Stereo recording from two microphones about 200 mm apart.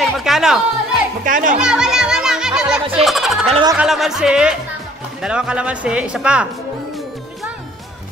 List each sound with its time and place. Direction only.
0.0 s chatter: centre (ahead or behind)
1.2 s a child's voice: 40° right (ahead or behind)
1.6 s music: 5° right (ahead or behind)
3.4 s speech: 25° right (ahead or behind)
3.7 s speech: centre (ahead or behind)